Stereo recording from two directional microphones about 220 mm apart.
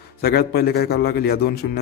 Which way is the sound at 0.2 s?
45° left (ahead or behind).